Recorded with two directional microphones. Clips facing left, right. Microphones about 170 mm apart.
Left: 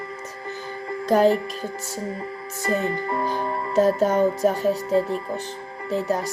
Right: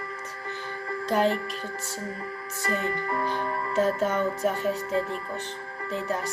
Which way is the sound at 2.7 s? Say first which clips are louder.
Left 5 dB; 25° left (ahead or behind).